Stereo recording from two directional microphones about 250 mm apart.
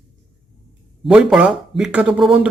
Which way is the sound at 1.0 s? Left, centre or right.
Centre.